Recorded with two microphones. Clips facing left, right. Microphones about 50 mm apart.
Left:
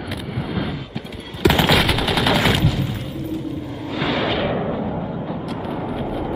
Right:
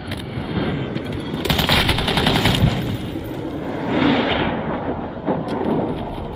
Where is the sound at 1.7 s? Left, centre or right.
Centre.